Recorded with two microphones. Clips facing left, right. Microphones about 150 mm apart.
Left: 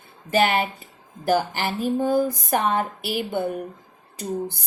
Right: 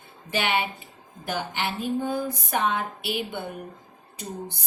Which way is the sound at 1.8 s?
45° left (ahead or behind).